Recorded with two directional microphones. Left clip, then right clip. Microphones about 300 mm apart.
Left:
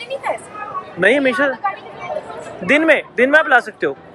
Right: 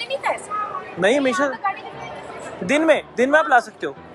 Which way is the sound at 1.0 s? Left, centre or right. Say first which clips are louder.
Left 4 dB; centre.